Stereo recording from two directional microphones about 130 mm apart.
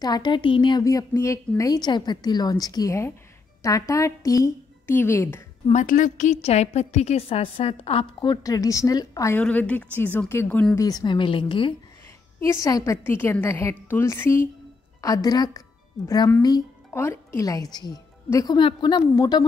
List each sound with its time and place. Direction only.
0.0 s a woman's voice: 35° left (ahead or behind); by 5.4 s 15° left (ahead or behind)
5.7 s a woman's voice: 75° left (ahead or behind); by 9.4 s 25° left (ahead or behind)
9.4 s a woman's voice: 10° left (ahead or behind); by 11.7 s 40° left (ahead or behind)
12.4 s a woman's voice: 25° left (ahead or behind)
16.9 s a woman's voice: 20° left (ahead or behind)